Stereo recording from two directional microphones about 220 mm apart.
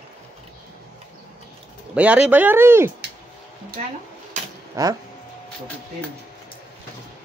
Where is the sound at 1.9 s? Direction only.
5° right (ahead or behind).